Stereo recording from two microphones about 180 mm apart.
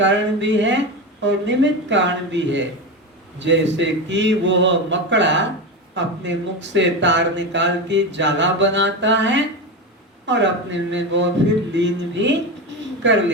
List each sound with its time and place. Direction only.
0.0 s a man's voice: 90° right